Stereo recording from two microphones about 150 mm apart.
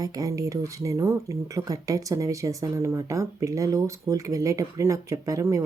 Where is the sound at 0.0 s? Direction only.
25° right (ahead or behind).